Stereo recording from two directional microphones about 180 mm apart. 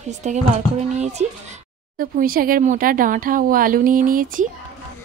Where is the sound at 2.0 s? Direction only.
50° right (ahead or behind).